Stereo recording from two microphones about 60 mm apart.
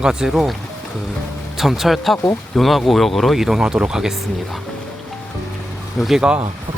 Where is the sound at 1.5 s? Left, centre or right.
Centre.